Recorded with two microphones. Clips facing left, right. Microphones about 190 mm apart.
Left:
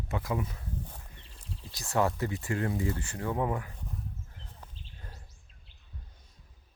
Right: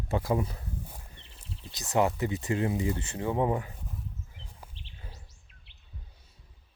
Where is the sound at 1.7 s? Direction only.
20° right (ahead or behind).